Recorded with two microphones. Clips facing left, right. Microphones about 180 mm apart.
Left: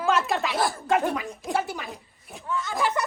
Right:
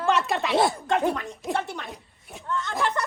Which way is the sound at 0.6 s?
20° right (ahead or behind).